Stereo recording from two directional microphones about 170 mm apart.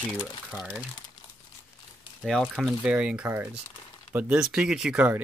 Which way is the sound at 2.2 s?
Centre (ahead or behind).